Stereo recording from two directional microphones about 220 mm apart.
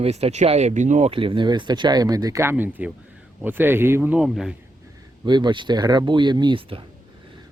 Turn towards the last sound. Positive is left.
turn(degrees=-25)  # may be behind; listen again after turning